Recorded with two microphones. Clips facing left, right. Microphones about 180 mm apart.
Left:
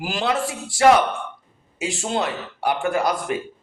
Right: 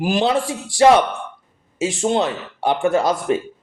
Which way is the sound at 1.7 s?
25° right (ahead or behind).